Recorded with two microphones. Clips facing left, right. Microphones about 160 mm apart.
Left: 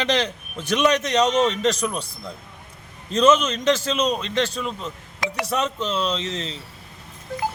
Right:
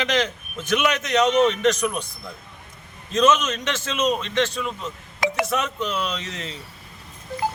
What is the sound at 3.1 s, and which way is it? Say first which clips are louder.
A man's voice: left 2 dB; 30° left (ahead or behind).